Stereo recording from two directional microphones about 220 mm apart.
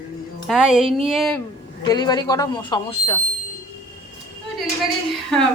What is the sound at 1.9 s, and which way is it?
Speech, 20° left (ahead or behind).